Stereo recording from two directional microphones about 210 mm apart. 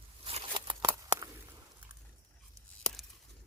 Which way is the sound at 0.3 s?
25° right (ahead or behind).